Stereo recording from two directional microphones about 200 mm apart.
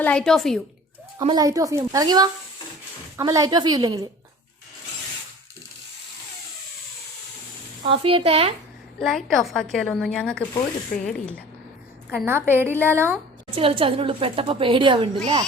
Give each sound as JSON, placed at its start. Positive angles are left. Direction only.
{"t": 0.0, "sound": "a woman's voice", "side_deg": 5}
{"t": 1.2, "sound": "a woman's voice", "side_deg": -20}
{"t": 7.9, "sound": "a woman's voice", "side_deg": -25}
{"t": 9.0, "sound": "a woman's voice", "side_deg": 0}
{"t": 12.1, "sound": "a woman's voice", "side_deg": -10}
{"t": 13.6, "sound": "a woman's voice", "side_deg": -25}